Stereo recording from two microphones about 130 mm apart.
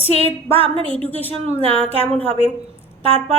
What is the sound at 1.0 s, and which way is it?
Speech, 15° left (ahead or behind).